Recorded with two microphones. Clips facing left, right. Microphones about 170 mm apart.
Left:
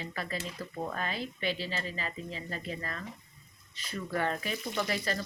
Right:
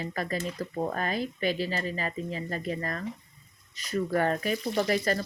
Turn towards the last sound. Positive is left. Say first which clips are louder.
# right 6 dB
turn(degrees=-45)  # may be behind; listen again after turning